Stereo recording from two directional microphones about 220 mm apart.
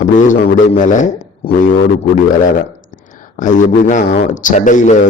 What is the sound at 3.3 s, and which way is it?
Speech, 35° left (ahead or behind).